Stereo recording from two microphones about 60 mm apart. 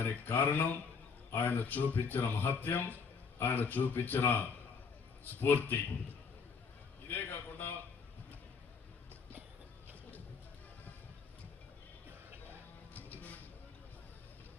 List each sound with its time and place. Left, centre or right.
0.0 s a man's voice: left
7.1 s a sound: left
12.5 s music: left